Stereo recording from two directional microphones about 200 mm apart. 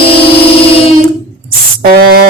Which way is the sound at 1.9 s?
50° right (ahead or behind).